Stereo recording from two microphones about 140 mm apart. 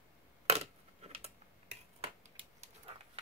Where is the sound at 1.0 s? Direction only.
50° right (ahead or behind).